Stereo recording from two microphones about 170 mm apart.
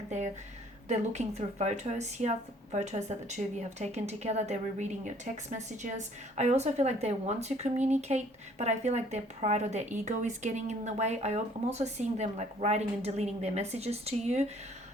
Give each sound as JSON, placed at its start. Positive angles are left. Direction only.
{"t": 0.9, "sound": "speech", "side_deg": -40}